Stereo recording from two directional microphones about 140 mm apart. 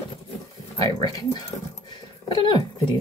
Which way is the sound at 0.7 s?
30° left (ahead or behind).